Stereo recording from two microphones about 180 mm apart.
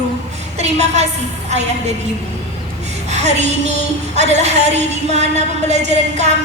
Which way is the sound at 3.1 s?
40° right (ahead or behind).